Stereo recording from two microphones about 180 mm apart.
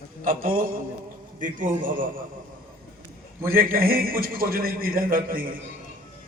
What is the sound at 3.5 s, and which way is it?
A man's voice, 55° right (ahead or behind).